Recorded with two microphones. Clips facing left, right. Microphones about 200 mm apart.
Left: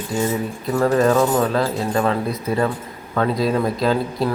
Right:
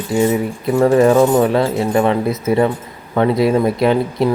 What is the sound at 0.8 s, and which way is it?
Speech, 15° right (ahead or behind).